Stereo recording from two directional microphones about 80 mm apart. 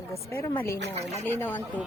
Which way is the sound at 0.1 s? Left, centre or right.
Left.